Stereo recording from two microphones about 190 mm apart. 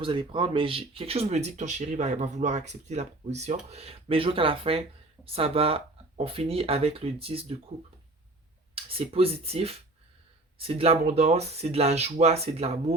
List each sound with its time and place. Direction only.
0.0 s speech: 25° right (ahead or behind)
8.7 s speech: 30° right (ahead or behind)